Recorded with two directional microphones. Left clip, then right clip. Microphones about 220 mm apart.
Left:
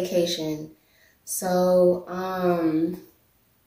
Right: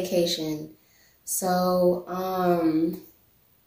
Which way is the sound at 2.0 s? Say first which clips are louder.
Even; centre (ahead or behind).